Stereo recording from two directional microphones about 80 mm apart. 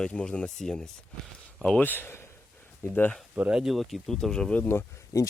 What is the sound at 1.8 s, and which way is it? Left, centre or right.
Speech, left.